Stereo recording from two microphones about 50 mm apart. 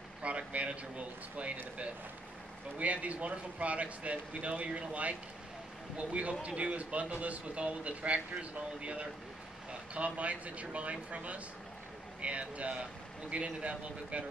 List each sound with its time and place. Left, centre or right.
0.2 s speech: right
2.8 s speech: right